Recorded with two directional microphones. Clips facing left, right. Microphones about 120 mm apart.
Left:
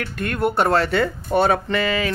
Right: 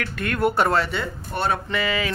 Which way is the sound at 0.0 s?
30° left (ahead or behind).